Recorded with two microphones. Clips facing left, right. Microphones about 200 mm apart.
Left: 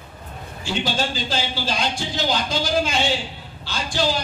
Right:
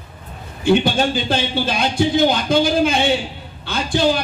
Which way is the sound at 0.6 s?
60° right (ahead or behind).